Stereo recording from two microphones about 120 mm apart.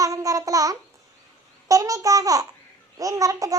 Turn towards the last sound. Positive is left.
turn(degrees=-30)  # may be behind; listen again after turning